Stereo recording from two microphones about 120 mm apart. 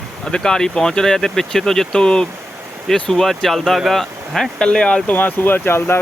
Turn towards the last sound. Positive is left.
turn(degrees=20)  # may be behind; listen again after turning